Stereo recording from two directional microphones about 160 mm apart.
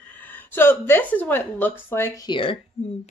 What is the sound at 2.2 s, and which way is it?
Speech, 30° left (ahead or behind).